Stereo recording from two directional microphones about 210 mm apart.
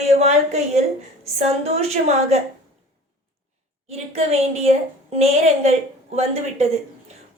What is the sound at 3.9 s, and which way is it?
A woman's voice, 30° right (ahead or behind).